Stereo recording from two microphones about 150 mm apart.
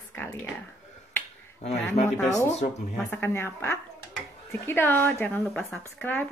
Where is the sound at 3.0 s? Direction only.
15° left (ahead or behind).